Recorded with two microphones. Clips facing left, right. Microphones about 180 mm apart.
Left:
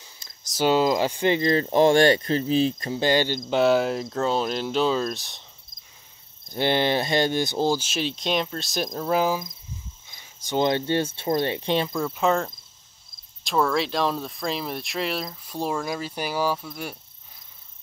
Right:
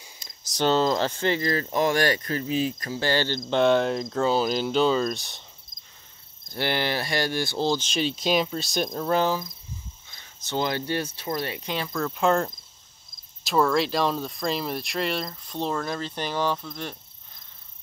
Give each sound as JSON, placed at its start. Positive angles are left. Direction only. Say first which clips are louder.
{"t": 0.0, "sound": "a sound", "louder": "right 2 dB", "side_deg": -15}
{"t": 0.5, "sound": "speech", "louder": "left 2 dB", "side_deg": 10}
{"t": 6.5, "sound": "speech", "louder": "left 4 dB", "side_deg": 20}
{"t": 12.0, "sound": "speech", "louder": "even", "side_deg": 0}